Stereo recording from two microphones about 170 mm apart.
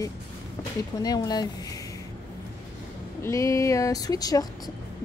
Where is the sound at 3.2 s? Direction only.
20° left (ahead or behind).